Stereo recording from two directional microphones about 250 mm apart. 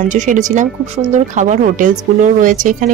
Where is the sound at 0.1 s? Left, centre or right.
Right.